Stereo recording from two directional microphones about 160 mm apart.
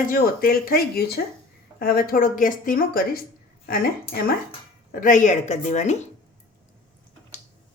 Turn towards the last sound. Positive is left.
turn(degrees=45)  # may be behind; listen again after turning